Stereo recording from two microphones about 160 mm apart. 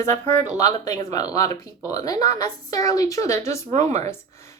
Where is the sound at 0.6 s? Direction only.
25° left (ahead or behind).